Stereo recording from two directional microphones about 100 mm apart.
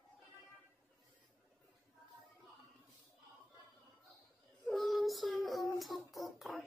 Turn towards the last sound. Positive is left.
turn(degrees=0)  # may be behind; listen again after turning